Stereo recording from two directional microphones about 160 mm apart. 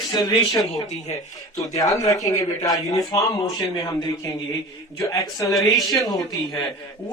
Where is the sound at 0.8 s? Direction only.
45° left (ahead or behind).